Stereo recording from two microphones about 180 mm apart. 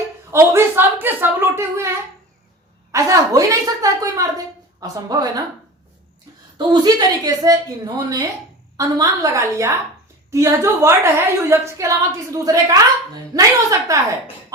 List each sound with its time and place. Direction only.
0.3 s a woman's voice: 15° right (ahead or behind)
2.9 s a woman's voice: 20° right (ahead or behind)
6.6 s a woman's voice: 20° right (ahead or behind)